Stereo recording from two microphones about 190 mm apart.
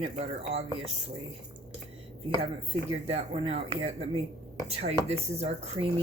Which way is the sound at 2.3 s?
30° right (ahead or behind).